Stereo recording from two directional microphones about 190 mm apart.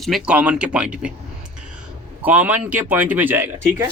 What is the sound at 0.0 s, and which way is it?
Speech, centre (ahead or behind).